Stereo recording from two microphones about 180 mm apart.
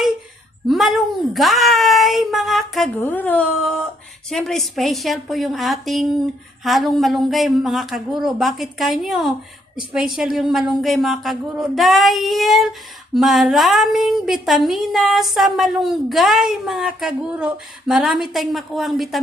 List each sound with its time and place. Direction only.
0.7 s a woman's voice: centre (ahead or behind)